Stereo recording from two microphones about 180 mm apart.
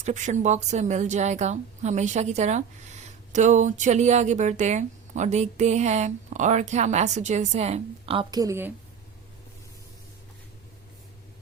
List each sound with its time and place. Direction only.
0.0 s speech: 40° right (ahead or behind); by 8.7 s 15° right (ahead or behind)